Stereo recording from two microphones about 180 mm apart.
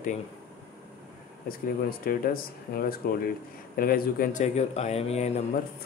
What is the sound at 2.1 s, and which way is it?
A man's voice, 55° left (ahead or behind).